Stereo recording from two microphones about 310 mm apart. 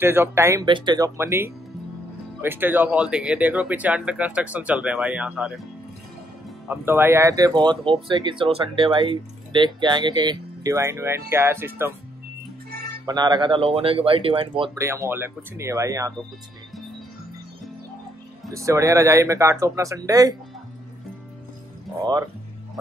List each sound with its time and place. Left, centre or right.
0.0 s speech: centre
6.7 s speech: centre
12.7 s music: right
13.0 s speech: centre
18.5 s speech: centre